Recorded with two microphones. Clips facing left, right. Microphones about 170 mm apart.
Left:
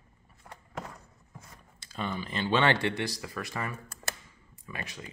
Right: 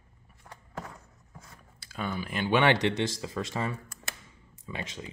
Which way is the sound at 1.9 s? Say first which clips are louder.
Right 1 dB; 5° right (ahead or behind).